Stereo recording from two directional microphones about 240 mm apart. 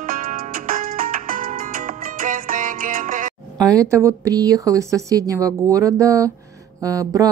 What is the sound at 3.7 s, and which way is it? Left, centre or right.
Speech, centre.